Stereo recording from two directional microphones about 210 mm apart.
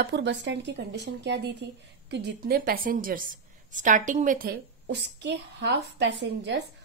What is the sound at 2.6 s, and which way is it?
A woman's voice, 40° right (ahead or behind).